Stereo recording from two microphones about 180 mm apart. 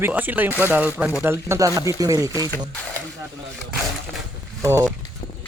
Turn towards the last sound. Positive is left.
turn(degrees=-15)  # may be behind; listen again after turning